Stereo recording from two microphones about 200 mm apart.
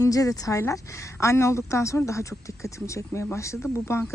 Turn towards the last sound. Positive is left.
turn(degrees=10)  # may be behind; listen again after turning